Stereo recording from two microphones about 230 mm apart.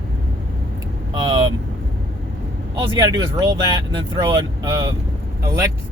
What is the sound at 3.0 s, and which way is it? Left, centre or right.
Speech, centre.